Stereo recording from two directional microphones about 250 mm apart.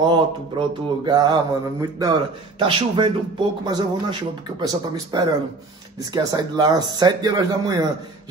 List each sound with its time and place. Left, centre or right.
0.0 s speech: centre